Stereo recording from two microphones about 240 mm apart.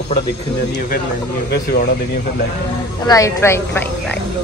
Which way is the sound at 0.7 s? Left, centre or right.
Left.